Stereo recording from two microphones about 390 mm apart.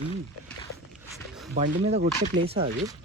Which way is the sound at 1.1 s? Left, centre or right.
Centre.